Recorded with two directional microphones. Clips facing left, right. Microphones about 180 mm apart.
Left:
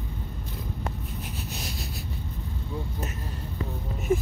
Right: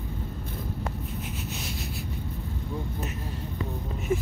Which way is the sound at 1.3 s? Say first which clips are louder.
Right 1 dB; 35° left (ahead or behind).